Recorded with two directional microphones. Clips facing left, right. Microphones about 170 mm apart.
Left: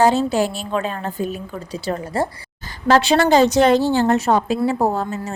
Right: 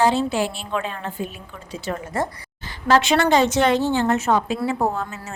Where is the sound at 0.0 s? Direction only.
40° left (ahead or behind).